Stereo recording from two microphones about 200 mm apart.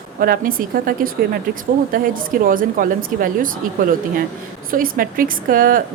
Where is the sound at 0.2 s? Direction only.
45° right (ahead or behind).